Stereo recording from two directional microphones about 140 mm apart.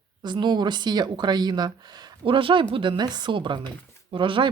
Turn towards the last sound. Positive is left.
turn(degrees=-35)  # may be behind; listen again after turning